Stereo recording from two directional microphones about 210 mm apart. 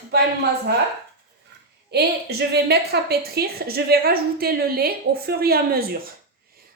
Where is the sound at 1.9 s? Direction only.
50° right (ahead or behind).